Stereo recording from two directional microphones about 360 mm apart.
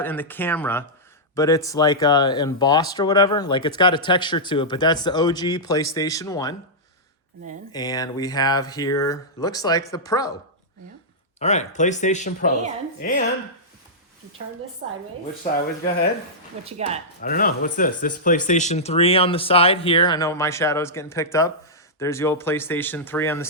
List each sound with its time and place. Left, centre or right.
0.0 s speech: centre
7.7 s speech: centre
11.3 s speech: centre
14.8 s a woman's voice: right
16.6 s speech: centre
17.2 s speech: left; by 23.5 s centre